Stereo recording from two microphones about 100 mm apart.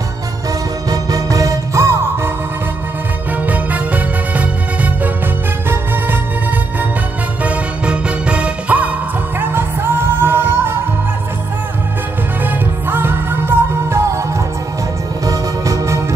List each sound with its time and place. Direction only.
0.8 s music: 35° right (ahead or behind)
3.4 s music: 15° right (ahead or behind)
7.4 s music: 10° right (ahead or behind)
12.4 s music: 20° right (ahead or behind)
15.2 s music: 35° right (ahead or behind)